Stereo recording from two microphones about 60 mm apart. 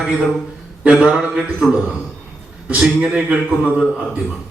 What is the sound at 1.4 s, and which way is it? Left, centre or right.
Speech, centre.